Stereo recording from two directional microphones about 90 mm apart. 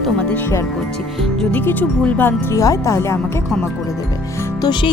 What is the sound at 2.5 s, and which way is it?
Speech, 35° left (ahead or behind).